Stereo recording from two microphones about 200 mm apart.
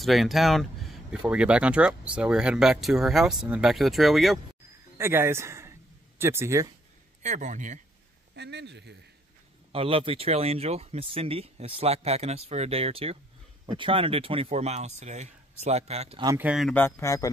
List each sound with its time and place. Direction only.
0.0 s speech: centre (ahead or behind)
4.9 s speech: 10° right (ahead or behind)
7.2 s speech: 40° right (ahead or behind)
8.4 s speech: 60° right (ahead or behind)
9.7 s speech: 25° right (ahead or behind)
16.3 s speech: 10° right (ahead or behind)
16.7 s speech: 10° left (ahead or behind)